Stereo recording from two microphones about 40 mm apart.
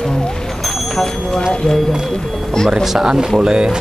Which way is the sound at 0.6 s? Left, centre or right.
Centre.